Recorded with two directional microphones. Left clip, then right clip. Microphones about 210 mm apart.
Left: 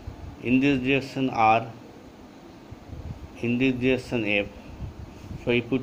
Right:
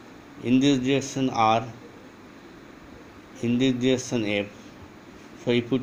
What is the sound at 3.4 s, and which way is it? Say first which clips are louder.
Speech: even; 90° right.